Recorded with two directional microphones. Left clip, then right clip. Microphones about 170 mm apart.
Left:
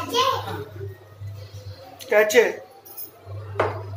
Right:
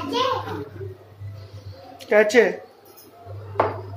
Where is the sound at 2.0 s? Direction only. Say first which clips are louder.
Right 1 dB; 25° right (ahead or behind).